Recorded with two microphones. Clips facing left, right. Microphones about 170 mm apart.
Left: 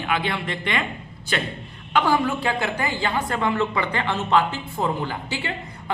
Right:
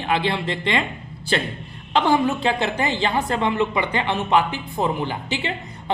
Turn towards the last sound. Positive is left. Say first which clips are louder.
# right 2 dB
turn(degrees=-20)  # may be behind; listen again after turning